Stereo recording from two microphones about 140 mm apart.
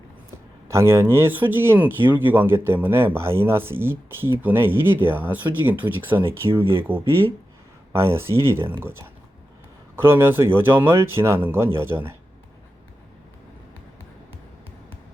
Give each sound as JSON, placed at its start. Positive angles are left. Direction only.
{"t": 0.7, "sound": "speech", "side_deg": -20}
{"t": 6.5, "sound": "speech", "side_deg": -40}
{"t": 7.9, "sound": "speech", "side_deg": -20}